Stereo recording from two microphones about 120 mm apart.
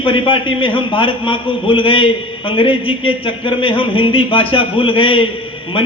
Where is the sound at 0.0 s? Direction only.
45° left (ahead or behind).